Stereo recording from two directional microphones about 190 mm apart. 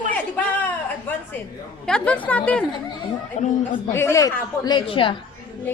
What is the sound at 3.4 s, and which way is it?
Speech, 35° left (ahead or behind).